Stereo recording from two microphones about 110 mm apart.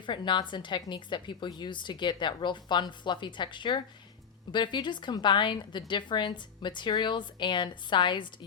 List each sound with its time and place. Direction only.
0.0 s a woman's voice: 45° left (ahead or behind)